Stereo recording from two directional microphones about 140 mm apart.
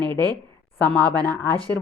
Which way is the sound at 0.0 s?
30° right (ahead or behind).